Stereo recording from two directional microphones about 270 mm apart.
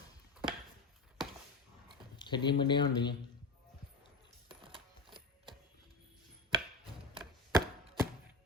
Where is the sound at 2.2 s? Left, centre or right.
Centre.